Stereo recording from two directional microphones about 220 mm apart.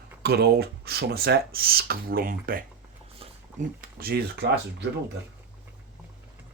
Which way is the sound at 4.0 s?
45° right (ahead or behind).